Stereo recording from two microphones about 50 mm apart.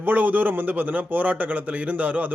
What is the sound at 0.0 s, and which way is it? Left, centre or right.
A man's voice, right.